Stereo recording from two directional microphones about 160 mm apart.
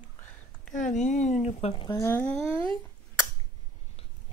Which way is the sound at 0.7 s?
50° left (ahead or behind).